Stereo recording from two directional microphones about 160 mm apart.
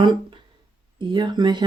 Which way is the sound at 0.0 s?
30° right (ahead or behind).